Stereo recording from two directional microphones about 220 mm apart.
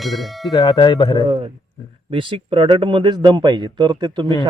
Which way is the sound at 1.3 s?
25° right (ahead or behind).